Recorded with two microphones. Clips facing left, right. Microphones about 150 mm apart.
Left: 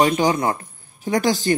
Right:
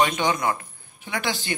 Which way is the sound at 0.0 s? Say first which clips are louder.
Left 5 dB; 35° left (ahead or behind).